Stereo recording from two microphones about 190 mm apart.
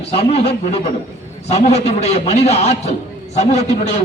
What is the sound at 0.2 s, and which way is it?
A man's voice, 30° left (ahead or behind).